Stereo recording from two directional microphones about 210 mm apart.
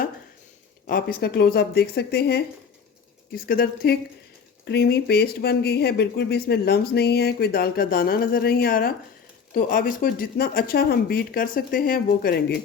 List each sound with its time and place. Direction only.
0.9 s speech: 45° left (ahead or behind)